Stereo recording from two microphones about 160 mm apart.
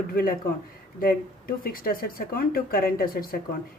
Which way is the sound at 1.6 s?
65° left (ahead or behind).